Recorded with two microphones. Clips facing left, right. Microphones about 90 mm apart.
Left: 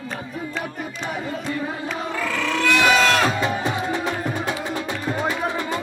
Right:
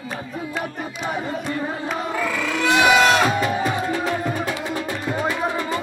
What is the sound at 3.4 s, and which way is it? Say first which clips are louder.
Music: right 1 dB; 25° left (ahead or behind).